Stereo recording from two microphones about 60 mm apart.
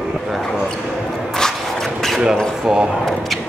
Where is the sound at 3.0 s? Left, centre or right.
Centre.